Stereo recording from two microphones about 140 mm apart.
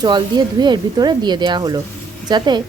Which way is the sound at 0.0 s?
30° right (ahead or behind).